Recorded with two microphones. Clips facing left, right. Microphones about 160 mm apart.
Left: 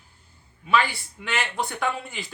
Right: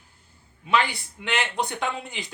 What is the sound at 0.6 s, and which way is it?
Speech, 20° right (ahead or behind).